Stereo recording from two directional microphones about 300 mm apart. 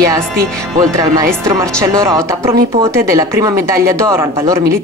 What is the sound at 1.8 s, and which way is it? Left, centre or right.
Speech, centre.